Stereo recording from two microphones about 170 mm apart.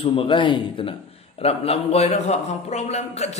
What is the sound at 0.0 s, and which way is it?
A man's voice, 35° left (ahead or behind).